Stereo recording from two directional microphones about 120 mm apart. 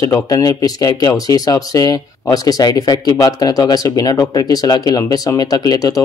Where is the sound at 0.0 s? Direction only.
30° left (ahead or behind).